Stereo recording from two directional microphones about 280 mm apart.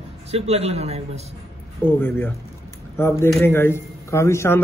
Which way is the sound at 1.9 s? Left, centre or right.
Centre.